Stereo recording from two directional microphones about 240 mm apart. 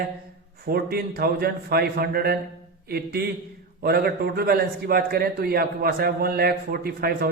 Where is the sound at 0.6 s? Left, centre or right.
Right.